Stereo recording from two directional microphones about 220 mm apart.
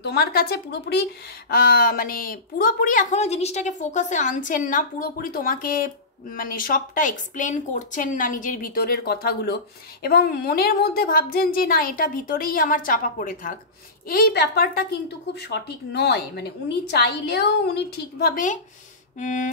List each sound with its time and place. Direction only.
0.0 s a woman's voice: 45° left (ahead or behind)